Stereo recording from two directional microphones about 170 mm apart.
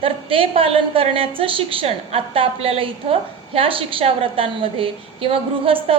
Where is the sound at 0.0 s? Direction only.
30° right (ahead or behind).